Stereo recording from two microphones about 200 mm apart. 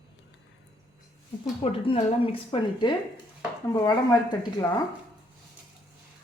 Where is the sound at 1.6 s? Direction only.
25° left (ahead or behind).